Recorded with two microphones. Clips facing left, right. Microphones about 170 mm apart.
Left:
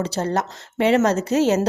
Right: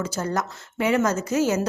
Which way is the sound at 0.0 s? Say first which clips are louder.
Left 4 dB; 30° left (ahead or behind).